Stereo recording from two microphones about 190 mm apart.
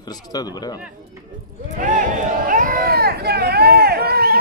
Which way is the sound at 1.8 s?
45° right (ahead or behind).